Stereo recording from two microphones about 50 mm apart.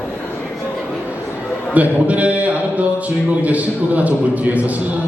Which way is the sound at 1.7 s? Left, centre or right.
Right.